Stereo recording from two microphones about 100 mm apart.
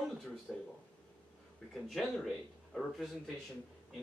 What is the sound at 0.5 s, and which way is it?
Speech, 5° right (ahead or behind).